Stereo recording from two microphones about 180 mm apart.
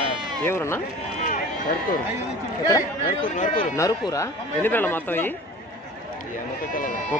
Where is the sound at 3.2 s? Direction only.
45° left (ahead or behind).